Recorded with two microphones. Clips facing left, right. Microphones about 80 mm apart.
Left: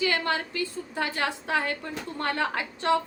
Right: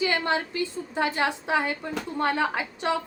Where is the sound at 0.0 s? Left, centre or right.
Right.